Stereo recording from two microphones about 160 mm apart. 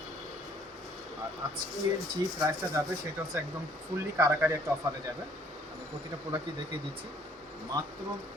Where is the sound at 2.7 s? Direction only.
20° right (ahead or behind).